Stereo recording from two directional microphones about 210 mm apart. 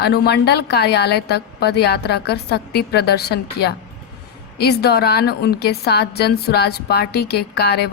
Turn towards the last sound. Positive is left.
turn(degrees=50)  # may be behind; listen again after turning